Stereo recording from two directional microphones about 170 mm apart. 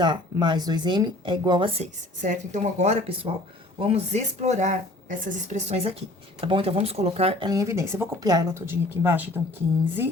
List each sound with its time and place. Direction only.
0.0 s speech: 25° right (ahead or behind)